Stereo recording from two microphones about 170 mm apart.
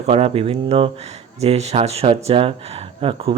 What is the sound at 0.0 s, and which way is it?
Speech, 35° right (ahead or behind).